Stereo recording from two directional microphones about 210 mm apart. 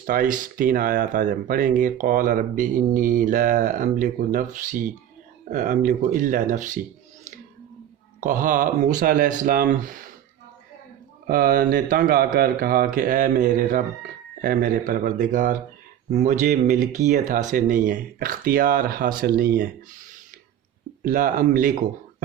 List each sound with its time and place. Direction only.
0.0 s speech: 40° right (ahead or behind)
8.2 s speech: 40° right (ahead or behind)
11.3 s speech: 45° right (ahead or behind)
21.0 s speech: 40° right (ahead or behind)